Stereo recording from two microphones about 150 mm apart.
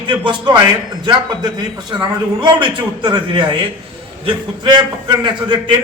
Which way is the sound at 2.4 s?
30° right (ahead or behind).